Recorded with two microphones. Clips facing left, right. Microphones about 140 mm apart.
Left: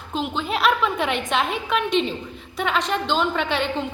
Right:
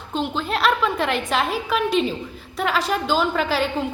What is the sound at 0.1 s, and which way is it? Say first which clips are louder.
A woman's voice: right 1 dB; centre (ahead or behind).